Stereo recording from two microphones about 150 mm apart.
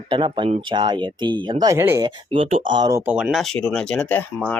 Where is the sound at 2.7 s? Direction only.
30° right (ahead or behind).